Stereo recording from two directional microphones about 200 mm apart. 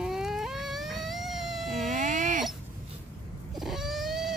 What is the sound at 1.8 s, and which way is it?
Baby cry, 40° right (ahead or behind).